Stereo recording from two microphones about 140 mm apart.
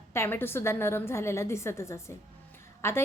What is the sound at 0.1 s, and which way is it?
A woman's voice, 15° left (ahead or behind).